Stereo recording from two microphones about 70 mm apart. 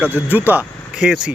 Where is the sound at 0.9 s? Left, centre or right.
Centre.